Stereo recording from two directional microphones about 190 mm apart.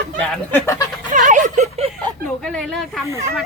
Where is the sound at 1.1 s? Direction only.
40° right (ahead or behind).